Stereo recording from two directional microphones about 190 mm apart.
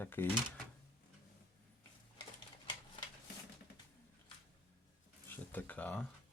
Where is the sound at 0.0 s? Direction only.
10° left (ahead or behind).